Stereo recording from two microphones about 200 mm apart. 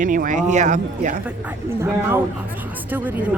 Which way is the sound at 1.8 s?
10° right (ahead or behind).